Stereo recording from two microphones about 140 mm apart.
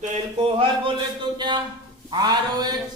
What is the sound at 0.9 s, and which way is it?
A woman's voice, 35° right (ahead or behind).